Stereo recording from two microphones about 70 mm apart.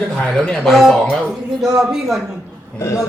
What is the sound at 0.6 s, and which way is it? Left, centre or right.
Speech, centre.